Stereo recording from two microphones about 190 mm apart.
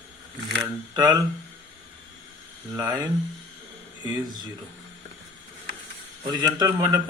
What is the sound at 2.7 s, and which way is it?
Speech, 10° right (ahead or behind).